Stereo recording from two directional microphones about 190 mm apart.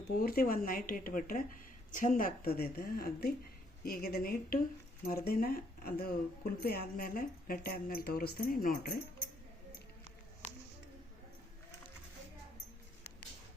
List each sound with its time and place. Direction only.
0.2 s speech: 50° left (ahead or behind)